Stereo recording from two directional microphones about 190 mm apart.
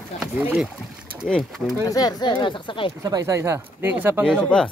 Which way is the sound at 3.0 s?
15° right (ahead or behind).